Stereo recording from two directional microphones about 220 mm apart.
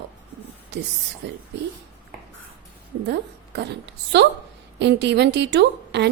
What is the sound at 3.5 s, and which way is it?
A woman's voice, 50° right (ahead or behind).